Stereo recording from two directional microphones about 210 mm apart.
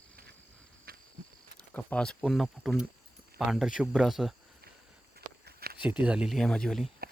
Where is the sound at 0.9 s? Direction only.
45° right (ahead or behind).